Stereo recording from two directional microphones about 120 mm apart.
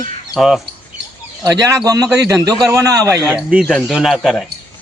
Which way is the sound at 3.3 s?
5° right (ahead or behind).